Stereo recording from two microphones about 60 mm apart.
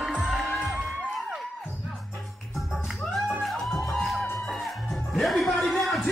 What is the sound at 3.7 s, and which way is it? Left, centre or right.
Music, centre.